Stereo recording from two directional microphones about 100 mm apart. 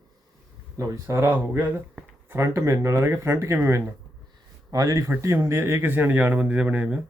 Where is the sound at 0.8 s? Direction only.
30° right (ahead or behind).